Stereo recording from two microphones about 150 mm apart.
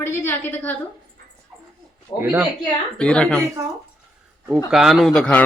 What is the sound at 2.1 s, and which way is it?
Speech, 30° left (ahead or behind).